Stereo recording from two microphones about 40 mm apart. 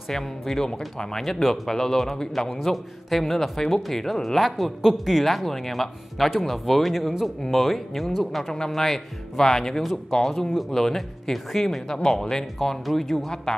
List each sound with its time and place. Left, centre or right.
0.1 s a man's voice: centre
13.5 s speech: centre